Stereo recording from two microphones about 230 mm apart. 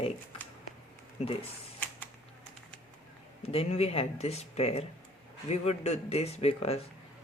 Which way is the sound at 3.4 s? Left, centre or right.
Left.